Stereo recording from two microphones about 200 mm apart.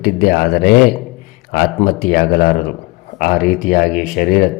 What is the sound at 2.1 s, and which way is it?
Speech, 50° left (ahead or behind).